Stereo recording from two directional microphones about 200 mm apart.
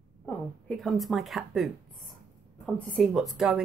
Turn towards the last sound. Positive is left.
turn(degrees=0)  # may be behind; listen again after turning